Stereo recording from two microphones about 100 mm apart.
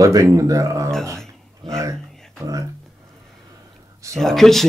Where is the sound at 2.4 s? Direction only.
35° right (ahead or behind).